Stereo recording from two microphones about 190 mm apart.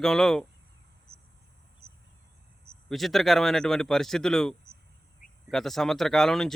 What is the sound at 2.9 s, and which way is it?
Speech, centre (ahead or behind).